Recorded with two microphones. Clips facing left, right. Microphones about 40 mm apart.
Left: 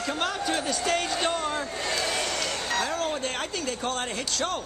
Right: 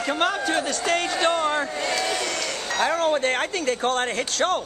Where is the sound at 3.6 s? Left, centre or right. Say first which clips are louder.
Right 7 dB; right.